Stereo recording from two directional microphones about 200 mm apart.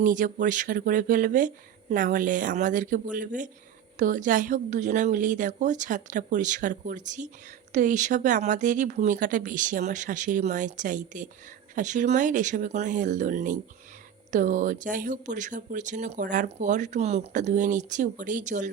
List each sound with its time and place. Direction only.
0.0 s speech: 40° right (ahead or behind)